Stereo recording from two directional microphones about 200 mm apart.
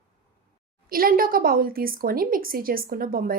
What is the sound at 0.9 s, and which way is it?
A woman's voice, 45° right (ahead or behind).